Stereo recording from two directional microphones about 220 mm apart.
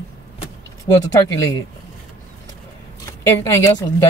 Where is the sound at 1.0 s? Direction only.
15° left (ahead or behind).